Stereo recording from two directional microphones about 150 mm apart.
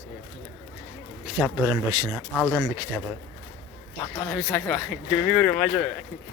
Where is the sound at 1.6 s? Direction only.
25° right (ahead or behind).